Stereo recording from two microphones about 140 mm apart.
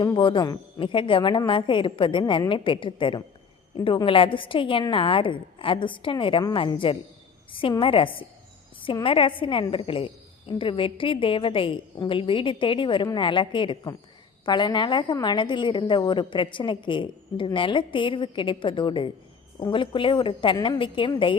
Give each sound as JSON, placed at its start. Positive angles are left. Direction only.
{"t": 0.0, "sound": "a woman's voice", "side_deg": 35}